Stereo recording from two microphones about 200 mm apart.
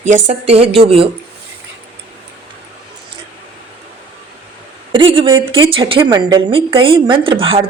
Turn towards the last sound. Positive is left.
turn(degrees=-25)  # may be behind; listen again after turning